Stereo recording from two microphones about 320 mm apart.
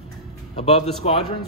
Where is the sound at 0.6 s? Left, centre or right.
Centre.